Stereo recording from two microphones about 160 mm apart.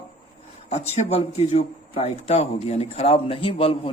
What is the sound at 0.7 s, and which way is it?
A man's voice, 45° left (ahead or behind).